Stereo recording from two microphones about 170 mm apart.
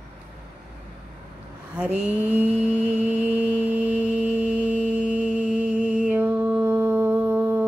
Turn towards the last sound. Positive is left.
turn(degrees=-10)  # may be behind; listen again after turning